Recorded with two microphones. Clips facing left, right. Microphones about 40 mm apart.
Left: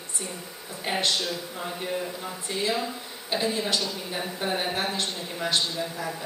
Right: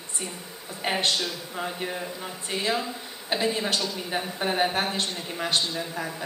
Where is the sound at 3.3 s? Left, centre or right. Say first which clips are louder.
Right 1 dB; right.